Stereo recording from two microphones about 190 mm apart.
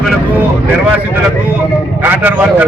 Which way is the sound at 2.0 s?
10° right (ahead or behind).